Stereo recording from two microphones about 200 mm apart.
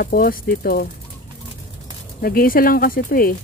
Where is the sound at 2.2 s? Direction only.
45° left (ahead or behind).